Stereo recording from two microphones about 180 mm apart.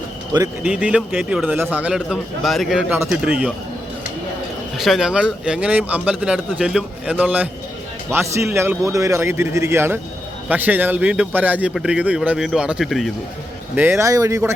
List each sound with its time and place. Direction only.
0.6 s a man's voice: 5° right (ahead or behind)
4.8 s a man's voice: 5° right (ahead or behind)
13.7 s a man's voice: 10° right (ahead or behind)